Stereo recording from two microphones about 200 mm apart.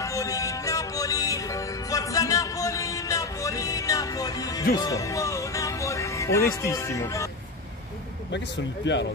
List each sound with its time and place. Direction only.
0.0 s music: 15° left (ahead or behind)
8.8 s speech: 60° left (ahead or behind)